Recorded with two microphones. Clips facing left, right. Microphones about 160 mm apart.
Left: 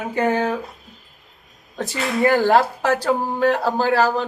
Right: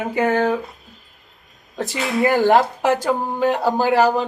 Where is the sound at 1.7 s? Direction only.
Centre (ahead or behind).